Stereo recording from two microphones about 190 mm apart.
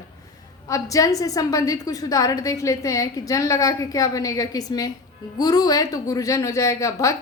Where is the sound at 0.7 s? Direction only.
20° left (ahead or behind).